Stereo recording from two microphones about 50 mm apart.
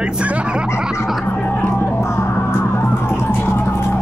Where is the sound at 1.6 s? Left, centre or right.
Left.